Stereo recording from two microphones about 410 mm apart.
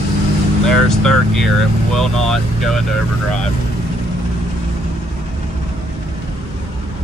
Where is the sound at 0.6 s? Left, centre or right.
Centre.